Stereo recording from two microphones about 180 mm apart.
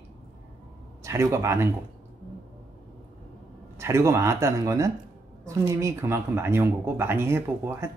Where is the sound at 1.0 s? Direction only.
15° right (ahead or behind).